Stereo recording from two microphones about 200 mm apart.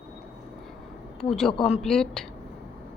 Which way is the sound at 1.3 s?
5° left (ahead or behind).